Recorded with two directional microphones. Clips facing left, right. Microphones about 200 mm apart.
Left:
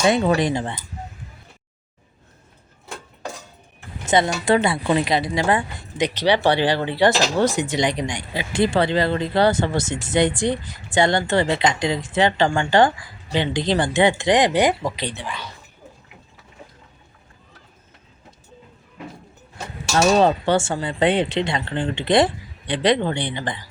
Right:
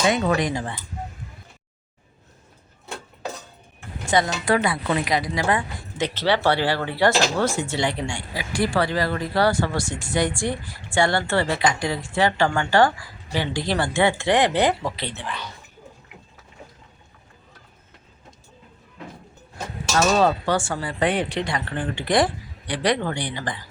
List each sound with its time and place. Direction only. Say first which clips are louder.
0.1 s a woman's voice: left 3 dB; 30° left (ahead or behind)
4.0 s a sound: left 3 dB; 20° left (ahead or behind)
4.4 s a woman's voice: left 3 dB; 25° left (ahead or behind)
6.0 s a woman's voice: left 3 dB; 15° left (ahead or behind)
20.1 s a woman's voice: left 3 dB; 25° left (ahead or behind)